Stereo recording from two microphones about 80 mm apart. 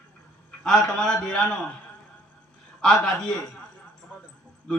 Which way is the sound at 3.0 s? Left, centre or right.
Centre.